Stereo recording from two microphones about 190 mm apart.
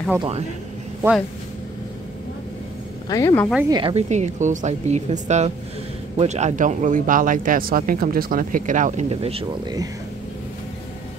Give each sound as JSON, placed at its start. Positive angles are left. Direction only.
{"t": 0.2, "sound": "speech", "side_deg": -35}
{"t": 3.1, "sound": "speech", "side_deg": 15}
{"t": 3.6, "sound": "a woman's voice", "side_deg": -20}
{"t": 3.9, "sound": "speech", "side_deg": -35}